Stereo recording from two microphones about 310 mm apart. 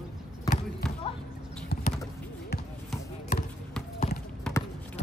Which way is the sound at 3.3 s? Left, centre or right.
Left.